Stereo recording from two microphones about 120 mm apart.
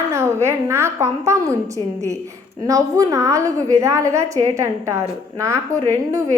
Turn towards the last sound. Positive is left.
turn(degrees=-25)  # may be behind; listen again after turning